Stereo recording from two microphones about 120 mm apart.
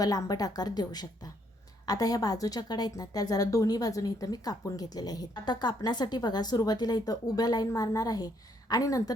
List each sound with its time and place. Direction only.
0.0 s a woman's voice: 30° left (ahead or behind)